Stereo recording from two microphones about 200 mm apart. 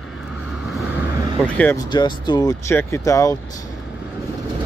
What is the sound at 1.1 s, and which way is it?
Vehicle, 20° right (ahead or behind).